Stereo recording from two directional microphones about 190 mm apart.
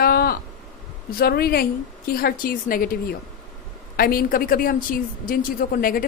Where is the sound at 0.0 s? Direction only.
55° left (ahead or behind).